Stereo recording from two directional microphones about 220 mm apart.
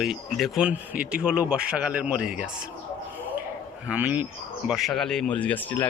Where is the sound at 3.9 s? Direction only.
5° right (ahead or behind).